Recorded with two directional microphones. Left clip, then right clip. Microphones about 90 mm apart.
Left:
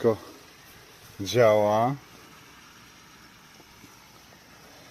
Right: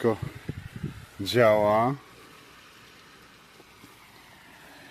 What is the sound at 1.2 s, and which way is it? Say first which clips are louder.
Speech: even; 45° right (ahead or behind).